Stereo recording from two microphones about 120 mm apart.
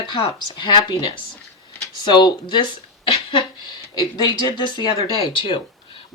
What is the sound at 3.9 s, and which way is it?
Speech, 35° left (ahead or behind).